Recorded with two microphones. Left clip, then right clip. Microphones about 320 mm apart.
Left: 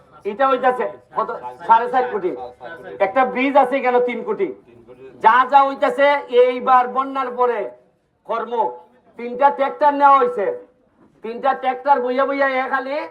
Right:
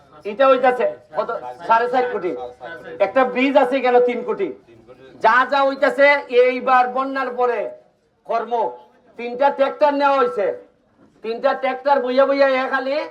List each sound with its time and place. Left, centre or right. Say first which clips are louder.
0.3 s speech: right 2 dB; centre